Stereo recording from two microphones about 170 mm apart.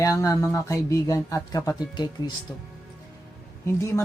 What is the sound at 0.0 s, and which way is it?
Speech, 20° left (ahead or behind).